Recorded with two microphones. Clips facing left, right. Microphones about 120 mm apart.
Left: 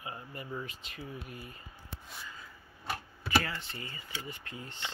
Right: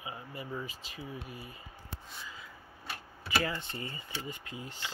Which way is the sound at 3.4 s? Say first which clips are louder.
Right 4 dB; 20° right (ahead or behind).